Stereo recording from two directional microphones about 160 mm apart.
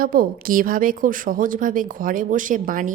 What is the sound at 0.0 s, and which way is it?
A woman's voice, 60° right (ahead or behind).